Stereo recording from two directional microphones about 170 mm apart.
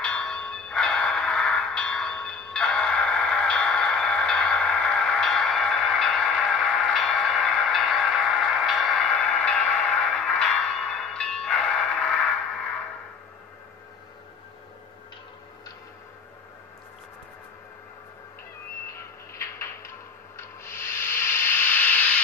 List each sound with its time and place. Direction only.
0.0 s clang: 5° left (ahead or behind)
19.3 s a sound: 15° left (ahead or behind)
20.3 s sanding: 15° left (ahead or behind)